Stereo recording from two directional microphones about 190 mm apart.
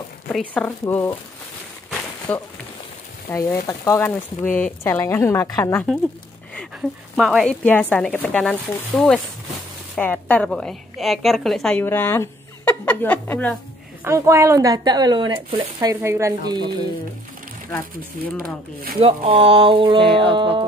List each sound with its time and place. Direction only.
0.3 s a woman's voice: 5° left (ahead or behind)
1.9 s a sound: 5° left (ahead or behind)
3.3 s a woman's voice: 20° left (ahead or behind)
7.2 s a woman's voice: centre (ahead or behind)
14.0 s speech: 15° right (ahead or behind)
18.9 s speech: 30° right (ahead or behind)